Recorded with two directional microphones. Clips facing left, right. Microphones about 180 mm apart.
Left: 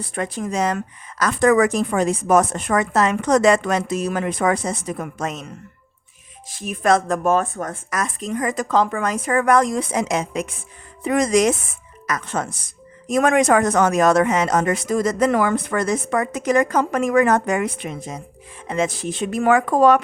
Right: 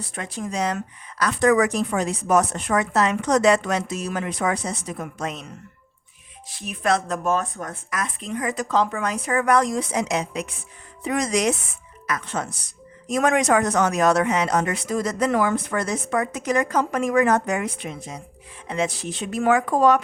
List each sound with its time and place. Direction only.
0.0 s speech: 55° left (ahead or behind)
6.5 s speech: 45° left (ahead or behind); by 20.0 s 65° left (ahead or behind)